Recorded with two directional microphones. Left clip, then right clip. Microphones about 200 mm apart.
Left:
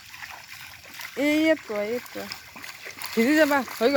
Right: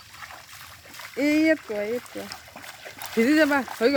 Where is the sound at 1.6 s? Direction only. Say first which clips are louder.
Even; 5° left (ahead or behind).